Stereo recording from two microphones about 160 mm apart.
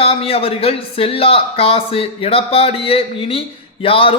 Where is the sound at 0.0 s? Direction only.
40° left (ahead or behind).